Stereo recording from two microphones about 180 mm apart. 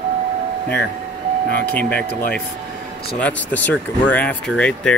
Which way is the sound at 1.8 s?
5° left (ahead or behind).